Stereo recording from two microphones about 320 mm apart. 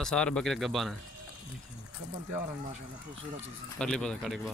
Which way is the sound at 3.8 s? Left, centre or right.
Centre.